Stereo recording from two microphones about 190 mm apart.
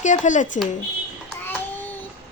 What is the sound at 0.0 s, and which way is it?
Speech, 40° left (ahead or behind).